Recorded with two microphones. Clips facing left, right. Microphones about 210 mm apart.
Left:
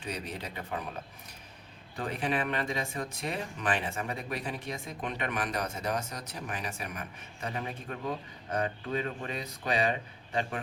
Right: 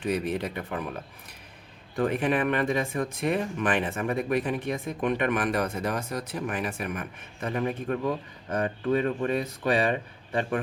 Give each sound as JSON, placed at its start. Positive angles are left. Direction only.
{"t": 0.0, "sound": "speech", "side_deg": -55}
{"t": 2.0, "sound": "speech", "side_deg": -55}